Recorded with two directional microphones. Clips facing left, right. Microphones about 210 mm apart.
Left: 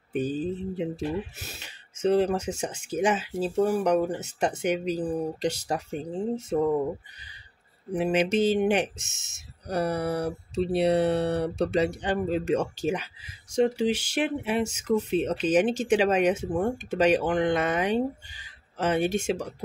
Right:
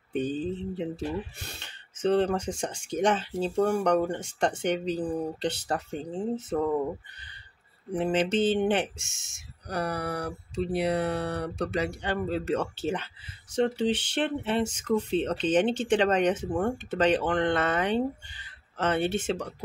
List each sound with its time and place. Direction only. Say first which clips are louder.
0.1 s speech: left 1 dB; 5° left (ahead or behind)
7.9 s speech: left 2 dB; 10° left (ahead or behind)
9.7 s mantra: left 4 dB; 25° left (ahead or behind)
13.7 s speech: left 1 dB; 10° left (ahead or behind)